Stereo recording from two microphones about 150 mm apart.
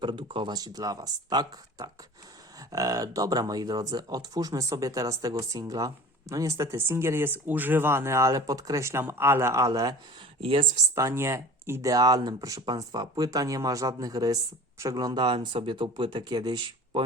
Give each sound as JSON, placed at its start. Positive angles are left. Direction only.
{"t": 0.0, "sound": "speech", "side_deg": -35}
{"t": 10.9, "sound": "speech", "side_deg": -20}